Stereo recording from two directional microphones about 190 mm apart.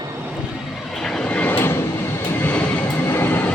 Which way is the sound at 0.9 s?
5° left (ahead or behind).